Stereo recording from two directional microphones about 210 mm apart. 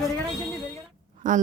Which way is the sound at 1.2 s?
40° right (ahead or behind).